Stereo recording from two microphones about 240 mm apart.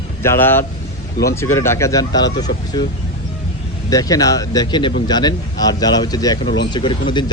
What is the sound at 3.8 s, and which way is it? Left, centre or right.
Speech, centre.